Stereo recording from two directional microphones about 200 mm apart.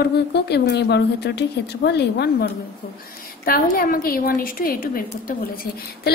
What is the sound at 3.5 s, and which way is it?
A woman's voice, 45° left (ahead or behind).